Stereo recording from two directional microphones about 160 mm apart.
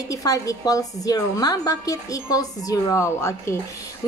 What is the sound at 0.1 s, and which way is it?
A woman's voice, 20° left (ahead or behind).